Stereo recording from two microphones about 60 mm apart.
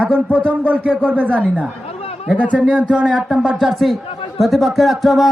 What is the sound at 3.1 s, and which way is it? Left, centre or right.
Speech, centre.